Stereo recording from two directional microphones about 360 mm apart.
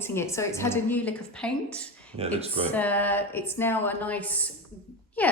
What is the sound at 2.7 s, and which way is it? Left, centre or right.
A woman's voice, centre.